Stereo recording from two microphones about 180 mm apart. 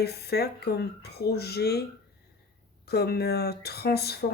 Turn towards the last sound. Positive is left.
turn(degrees=60)  # may be behind; listen again after turning